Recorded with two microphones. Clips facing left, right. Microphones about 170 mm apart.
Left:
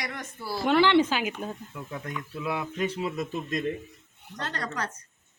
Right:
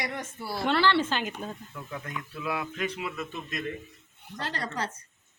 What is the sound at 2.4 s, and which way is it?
A man's voice, 25° left (ahead or behind).